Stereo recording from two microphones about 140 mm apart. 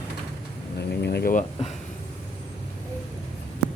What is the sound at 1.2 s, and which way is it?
Speech, 75° left (ahead or behind).